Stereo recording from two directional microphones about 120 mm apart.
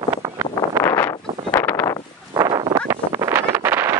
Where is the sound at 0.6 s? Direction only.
20° left (ahead or behind).